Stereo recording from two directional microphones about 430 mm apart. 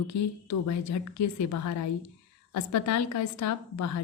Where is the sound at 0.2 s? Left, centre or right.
Left.